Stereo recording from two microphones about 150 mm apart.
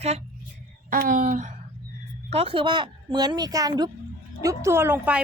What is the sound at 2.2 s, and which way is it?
A woman's voice, 40° right (ahead or behind).